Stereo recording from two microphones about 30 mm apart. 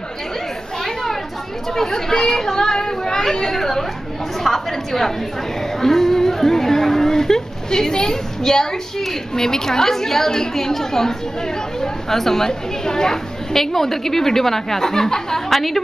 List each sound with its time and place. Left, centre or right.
1.8 s a woman's voice: centre
15.5 s a woman's voice: centre